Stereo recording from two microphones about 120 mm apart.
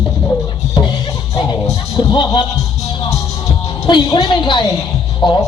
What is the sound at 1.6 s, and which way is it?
Music, 35° left (ahead or behind).